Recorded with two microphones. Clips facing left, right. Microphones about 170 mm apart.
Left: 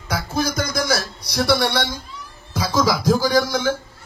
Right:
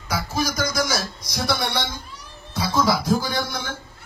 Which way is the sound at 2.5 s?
90° left.